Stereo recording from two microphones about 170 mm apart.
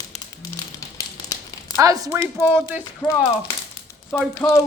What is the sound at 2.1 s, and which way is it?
Speech, 10° right (ahead or behind).